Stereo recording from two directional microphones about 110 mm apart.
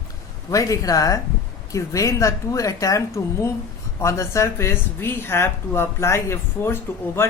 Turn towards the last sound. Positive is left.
turn(degrees=20)  # may be behind; listen again after turning